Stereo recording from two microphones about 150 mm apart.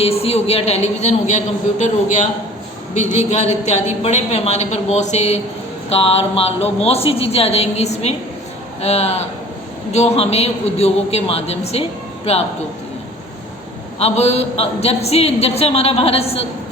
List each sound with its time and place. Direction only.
0.0 s a man's voice: 40° left (ahead or behind)
14.0 s a man's voice: 45° left (ahead or behind)